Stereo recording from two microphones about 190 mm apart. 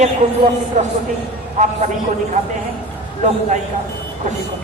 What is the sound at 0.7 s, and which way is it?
Speech, 40° right (ahead or behind).